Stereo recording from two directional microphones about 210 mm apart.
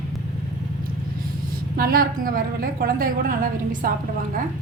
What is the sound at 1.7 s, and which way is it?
A woman's voice, 45° right (ahead or behind).